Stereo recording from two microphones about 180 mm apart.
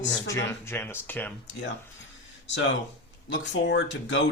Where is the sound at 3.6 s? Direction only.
80° left.